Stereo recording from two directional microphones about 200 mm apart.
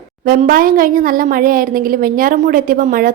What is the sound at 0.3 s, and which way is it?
Speech, 45° right (ahead or behind).